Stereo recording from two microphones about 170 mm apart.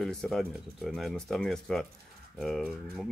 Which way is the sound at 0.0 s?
Centre (ahead or behind).